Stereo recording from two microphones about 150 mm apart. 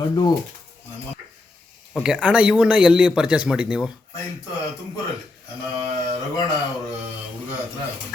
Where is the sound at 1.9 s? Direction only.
5° right (ahead or behind).